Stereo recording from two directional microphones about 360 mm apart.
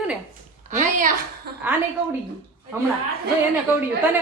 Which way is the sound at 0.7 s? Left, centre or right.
Right.